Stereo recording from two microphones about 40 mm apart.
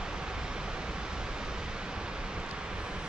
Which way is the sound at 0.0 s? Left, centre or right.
Centre.